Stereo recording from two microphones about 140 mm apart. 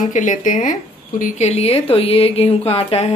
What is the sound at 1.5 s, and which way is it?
A woman's voice, 45° left (ahead or behind).